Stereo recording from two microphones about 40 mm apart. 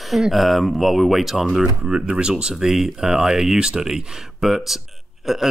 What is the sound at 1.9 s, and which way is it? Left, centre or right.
Speech, right.